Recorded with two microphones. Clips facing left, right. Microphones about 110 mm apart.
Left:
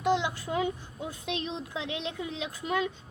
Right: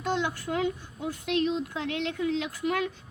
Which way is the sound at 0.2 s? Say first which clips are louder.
Right 2 dB; 20° left (ahead or behind).